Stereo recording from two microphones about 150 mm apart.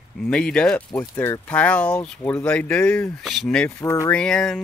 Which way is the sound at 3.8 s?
20° left (ahead or behind).